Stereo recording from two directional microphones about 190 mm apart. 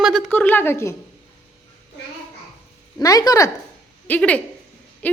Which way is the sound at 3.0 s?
20° left (ahead or behind).